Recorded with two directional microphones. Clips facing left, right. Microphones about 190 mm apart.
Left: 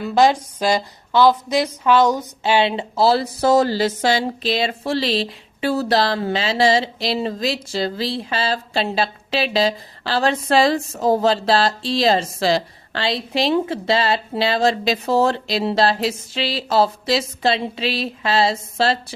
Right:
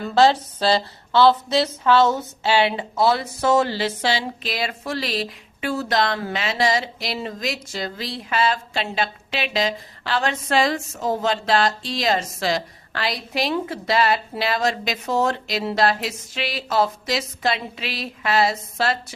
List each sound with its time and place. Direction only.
0.0 s speech: 15° left (ahead or behind); by 4.3 s 45° left (ahead or behind)
4.4 s speech: 25° left (ahead or behind)